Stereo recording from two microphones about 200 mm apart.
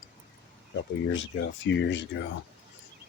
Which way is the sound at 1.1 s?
65° left (ahead or behind).